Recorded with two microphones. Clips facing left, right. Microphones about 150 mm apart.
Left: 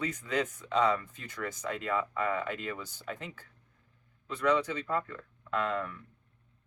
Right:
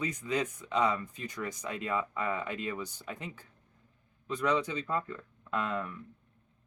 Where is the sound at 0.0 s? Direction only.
15° right (ahead or behind).